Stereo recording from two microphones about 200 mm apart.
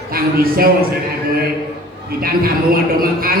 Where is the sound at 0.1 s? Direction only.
45° right (ahead or behind).